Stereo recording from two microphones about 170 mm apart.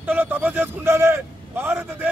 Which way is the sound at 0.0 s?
10° right (ahead or behind).